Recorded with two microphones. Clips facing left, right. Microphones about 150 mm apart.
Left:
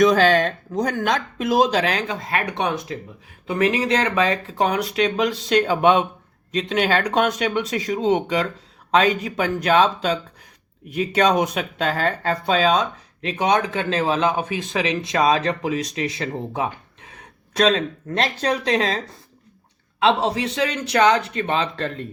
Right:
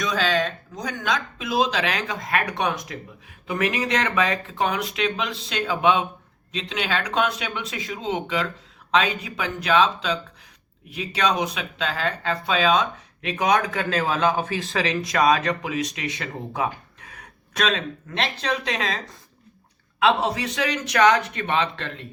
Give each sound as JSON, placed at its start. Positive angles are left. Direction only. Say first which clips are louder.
{"t": 0.0, "sound": "speech", "louder": "left 8 dB", "side_deg": 50}